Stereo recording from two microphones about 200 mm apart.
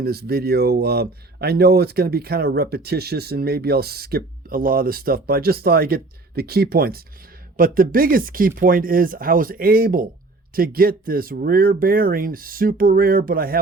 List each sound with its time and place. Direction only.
0.0 s speech: 50° right (ahead or behind)